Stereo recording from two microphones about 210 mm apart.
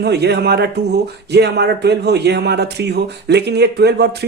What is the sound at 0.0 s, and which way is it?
A man's voice, 50° right (ahead or behind).